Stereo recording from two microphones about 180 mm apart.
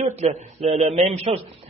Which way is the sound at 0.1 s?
40° right (ahead or behind).